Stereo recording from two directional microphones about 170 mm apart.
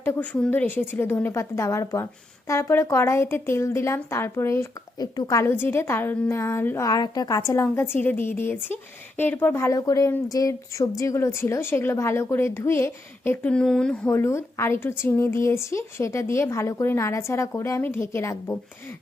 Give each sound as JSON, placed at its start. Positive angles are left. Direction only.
{"t": 0.0, "sound": "a woman's voice", "side_deg": 10}